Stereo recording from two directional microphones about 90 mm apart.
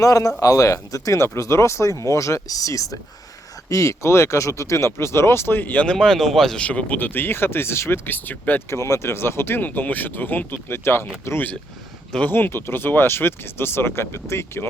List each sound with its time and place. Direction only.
0.0 s speech: 40° left (ahead or behind); by 6.7 s 5° left (ahead or behind)
6.7 s speech: 15° left (ahead or behind)